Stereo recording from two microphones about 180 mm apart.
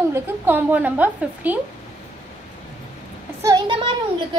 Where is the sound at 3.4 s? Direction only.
25° right (ahead or behind).